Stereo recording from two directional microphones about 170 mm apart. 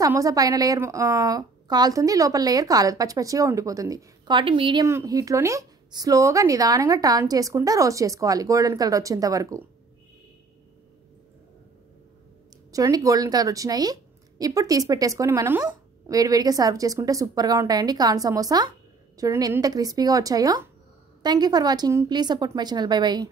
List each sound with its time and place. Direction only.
0.0 s a woman's voice: 20° right (ahead or behind)
4.8 s a woman's voice: 20° right (ahead or behind)
12.7 s a woman's voice: 20° right (ahead or behind)